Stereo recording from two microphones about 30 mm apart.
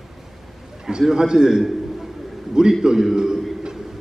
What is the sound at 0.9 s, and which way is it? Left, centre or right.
Speech, right.